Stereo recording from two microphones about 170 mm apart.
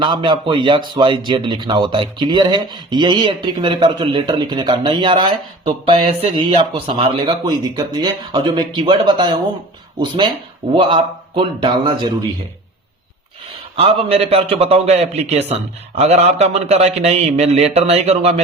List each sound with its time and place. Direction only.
0.0 s a man's voice: 30° right (ahead or behind)
13.7 s a man's voice: 35° right (ahead or behind)